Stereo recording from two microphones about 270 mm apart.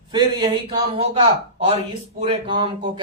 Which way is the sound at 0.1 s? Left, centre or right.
Centre.